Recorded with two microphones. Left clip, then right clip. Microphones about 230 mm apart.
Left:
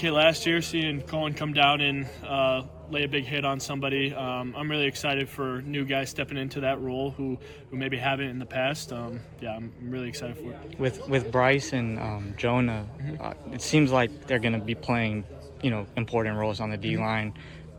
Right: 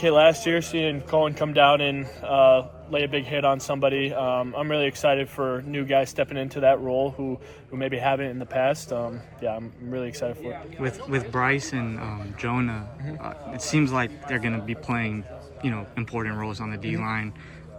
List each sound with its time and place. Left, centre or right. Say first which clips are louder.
0.0 s a man's voice: right 5 dB; centre
10.8 s a man's voice: left 2 dB; right